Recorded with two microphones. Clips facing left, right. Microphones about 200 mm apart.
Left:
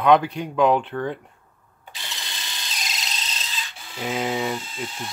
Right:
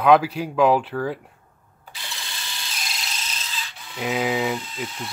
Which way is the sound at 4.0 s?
5° right (ahead or behind).